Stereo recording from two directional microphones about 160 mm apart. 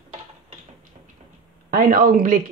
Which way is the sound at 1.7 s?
60° right (ahead or behind).